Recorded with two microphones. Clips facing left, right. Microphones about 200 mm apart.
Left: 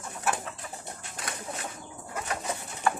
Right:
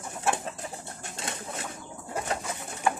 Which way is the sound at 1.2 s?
25° right (ahead or behind).